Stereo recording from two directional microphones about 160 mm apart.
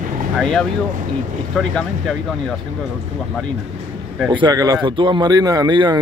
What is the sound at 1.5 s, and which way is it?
Speech, 5° left (ahead or behind).